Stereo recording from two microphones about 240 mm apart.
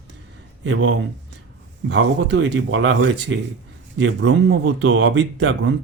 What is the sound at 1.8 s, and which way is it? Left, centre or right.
Speech, right.